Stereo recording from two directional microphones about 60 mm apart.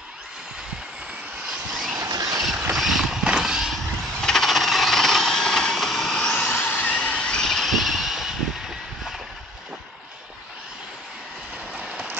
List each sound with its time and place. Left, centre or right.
1.7 s vehicle: centre
2.0 s vehicle: right
2.7 s a sound: centre
4.2 s coin: centre
6.6 s vehicle: left; by 9.1 s centre
11.8 s vehicle: centre